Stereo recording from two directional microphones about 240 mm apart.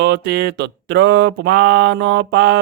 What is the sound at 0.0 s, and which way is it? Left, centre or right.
Speech, right.